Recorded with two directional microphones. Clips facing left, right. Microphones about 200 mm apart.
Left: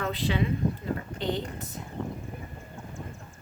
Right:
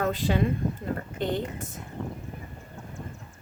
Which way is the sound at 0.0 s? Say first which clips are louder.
Right 3 dB; 45° right (ahead or behind).